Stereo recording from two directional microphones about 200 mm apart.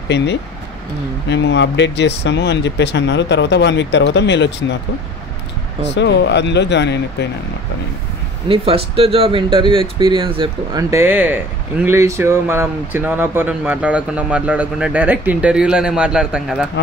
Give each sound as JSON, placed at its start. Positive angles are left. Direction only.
{"t": 0.1, "sound": "speech", "side_deg": 60}
{"t": 5.9, "sound": "speech", "side_deg": 60}
{"t": 8.5, "sound": "speech", "side_deg": -30}